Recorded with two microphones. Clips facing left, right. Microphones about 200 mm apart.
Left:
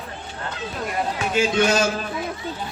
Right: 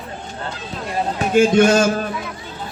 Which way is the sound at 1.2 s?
50° right (ahead or behind).